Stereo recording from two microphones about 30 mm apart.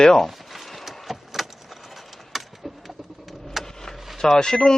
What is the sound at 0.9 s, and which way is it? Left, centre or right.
Vehicle, centre.